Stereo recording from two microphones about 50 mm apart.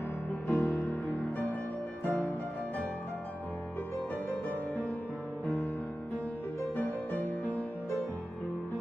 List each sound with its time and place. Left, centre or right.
0.5 s music: left
1.1 s music: left
4.3 s music: left
6.8 s music: left